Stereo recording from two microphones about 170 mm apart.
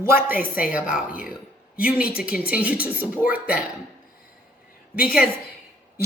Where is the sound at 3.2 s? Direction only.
60° left (ahead or behind).